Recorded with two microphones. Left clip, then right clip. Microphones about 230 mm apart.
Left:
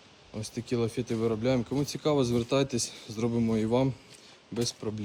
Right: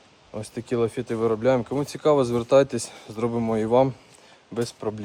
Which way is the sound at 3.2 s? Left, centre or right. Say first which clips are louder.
Right 5 dB; right.